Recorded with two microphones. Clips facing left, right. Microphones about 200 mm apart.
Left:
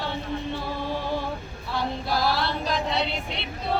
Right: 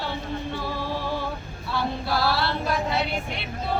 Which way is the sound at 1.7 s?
20° left (ahead or behind).